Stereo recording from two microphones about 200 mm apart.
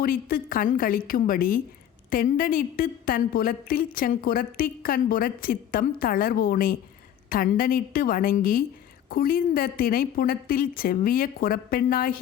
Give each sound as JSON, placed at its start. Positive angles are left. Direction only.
{"t": 0.0, "sound": "a woman's voice", "side_deg": 45}